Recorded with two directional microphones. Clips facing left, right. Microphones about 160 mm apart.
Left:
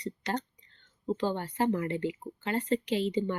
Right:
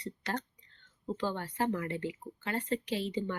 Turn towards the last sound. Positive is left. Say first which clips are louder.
# left 5 dB
turn(degrees=20)  # may be behind; listen again after turning